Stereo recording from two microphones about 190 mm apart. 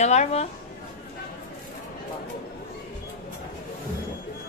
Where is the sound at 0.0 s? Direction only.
35° left (ahead or behind).